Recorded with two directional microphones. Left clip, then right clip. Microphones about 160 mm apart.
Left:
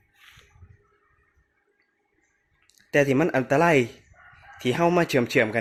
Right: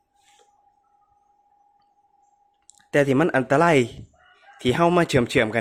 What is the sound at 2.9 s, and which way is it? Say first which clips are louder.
Speech: right 2 dB; 15° right (ahead or behind).